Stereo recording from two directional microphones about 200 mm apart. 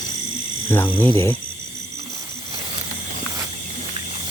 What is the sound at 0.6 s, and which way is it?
Speech, 10° left (ahead or behind).